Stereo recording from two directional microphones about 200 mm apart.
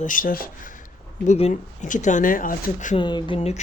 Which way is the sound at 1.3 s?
35° left (ahead or behind).